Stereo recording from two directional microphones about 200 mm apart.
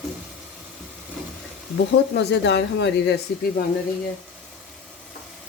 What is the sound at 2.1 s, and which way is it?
Speech, 60° left (ahead or behind).